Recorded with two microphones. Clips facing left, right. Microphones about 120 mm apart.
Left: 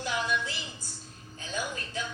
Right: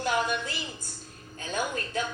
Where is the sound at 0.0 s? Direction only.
50° right (ahead or behind).